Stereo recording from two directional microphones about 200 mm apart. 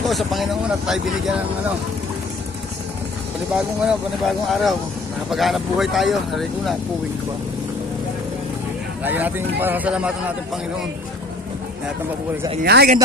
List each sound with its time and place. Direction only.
0.0 s speech: centre (ahead or behind)
3.5 s speech: centre (ahead or behind)
9.0 s speech: 10° right (ahead or behind)
12.6 s speech: 50° right (ahead or behind)